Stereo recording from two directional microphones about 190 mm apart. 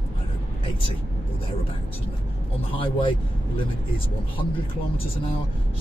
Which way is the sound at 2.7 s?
25° left (ahead or behind).